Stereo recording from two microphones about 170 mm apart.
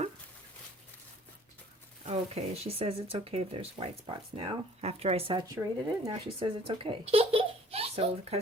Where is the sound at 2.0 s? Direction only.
35° right (ahead or behind).